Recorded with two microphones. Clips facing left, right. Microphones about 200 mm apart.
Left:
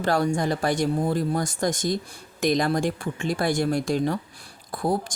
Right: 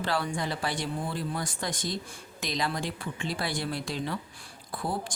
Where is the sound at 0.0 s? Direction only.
45° left (ahead or behind).